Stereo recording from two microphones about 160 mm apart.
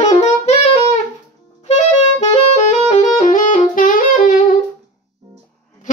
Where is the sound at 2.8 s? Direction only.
50° left (ahead or behind).